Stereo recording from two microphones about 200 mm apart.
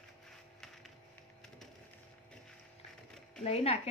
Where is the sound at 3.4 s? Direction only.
30° left (ahead or behind).